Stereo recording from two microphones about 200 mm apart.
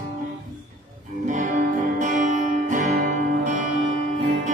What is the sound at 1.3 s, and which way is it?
Music, 40° right (ahead or behind).